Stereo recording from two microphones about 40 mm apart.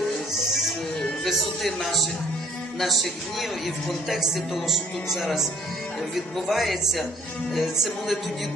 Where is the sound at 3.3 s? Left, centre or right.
Centre.